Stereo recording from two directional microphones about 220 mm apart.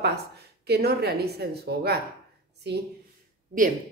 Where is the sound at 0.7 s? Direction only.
45° right (ahead or behind).